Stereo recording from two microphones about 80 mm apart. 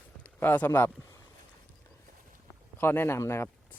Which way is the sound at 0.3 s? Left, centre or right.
Left.